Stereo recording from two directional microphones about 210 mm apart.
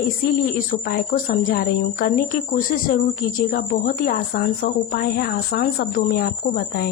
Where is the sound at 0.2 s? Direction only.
45° left (ahead or behind).